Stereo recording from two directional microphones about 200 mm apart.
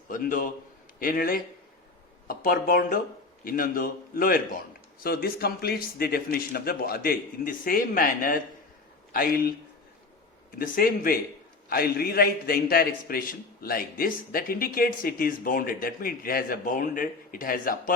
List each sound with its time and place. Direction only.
0.1 s a man's voice: 45° left (ahead or behind)